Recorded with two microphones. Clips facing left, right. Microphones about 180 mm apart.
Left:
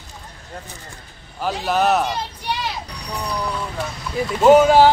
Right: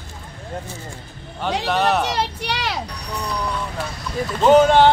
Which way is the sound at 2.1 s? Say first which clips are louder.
Right 2 dB; 80° right.